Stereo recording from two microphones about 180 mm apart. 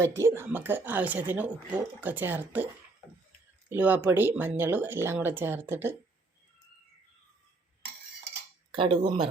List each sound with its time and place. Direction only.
0.0 s speech: 15° right (ahead or behind)
3.7 s speech: 10° right (ahead or behind)
8.7 s speech: 30° right (ahead or behind)